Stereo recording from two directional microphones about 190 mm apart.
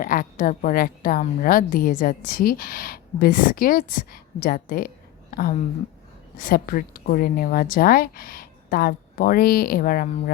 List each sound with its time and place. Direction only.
0.0 s a woman's voice: 45° left (ahead or behind)